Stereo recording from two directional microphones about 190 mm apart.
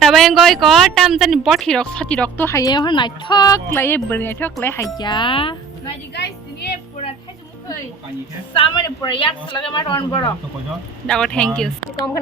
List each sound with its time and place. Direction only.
0.1 s a man's voice: centre (ahead or behind); by 5.5 s 25° left (ahead or behind)
8.5 s a man's voice: 25° left (ahead or behind)
11.0 s speech: 5° left (ahead or behind)